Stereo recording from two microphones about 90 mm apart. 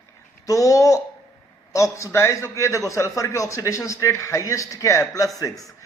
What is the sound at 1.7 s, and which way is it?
A man's voice, 35° left (ahead or behind).